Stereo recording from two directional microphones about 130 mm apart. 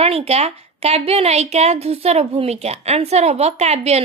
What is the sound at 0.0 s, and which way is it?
A woman's voice, 50° right (ahead or behind).